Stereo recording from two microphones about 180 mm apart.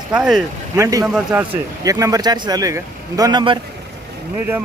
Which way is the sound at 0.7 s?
15° right (ahead or behind).